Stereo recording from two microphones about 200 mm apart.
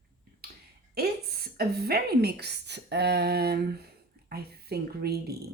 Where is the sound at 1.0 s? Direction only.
50° right (ahead or behind).